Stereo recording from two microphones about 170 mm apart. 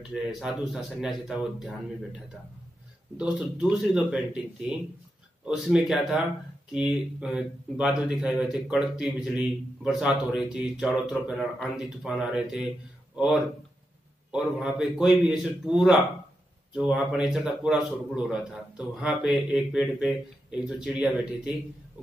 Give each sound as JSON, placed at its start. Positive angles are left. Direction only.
{"t": 0.1, "sound": "a man's voice", "side_deg": 0}